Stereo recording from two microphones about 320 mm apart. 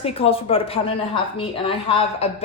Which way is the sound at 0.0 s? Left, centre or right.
Centre.